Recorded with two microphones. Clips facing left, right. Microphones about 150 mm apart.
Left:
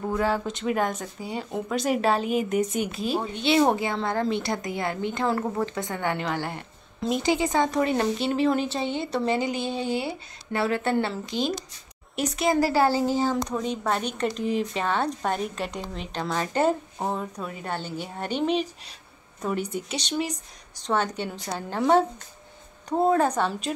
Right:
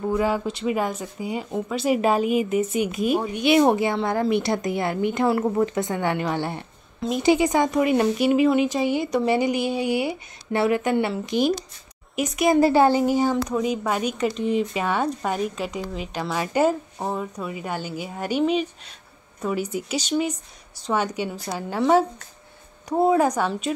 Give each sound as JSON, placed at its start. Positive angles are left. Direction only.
{"t": 0.1, "sound": "speech", "side_deg": -10}